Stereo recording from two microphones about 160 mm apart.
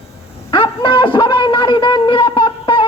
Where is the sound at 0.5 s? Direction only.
30° left (ahead or behind).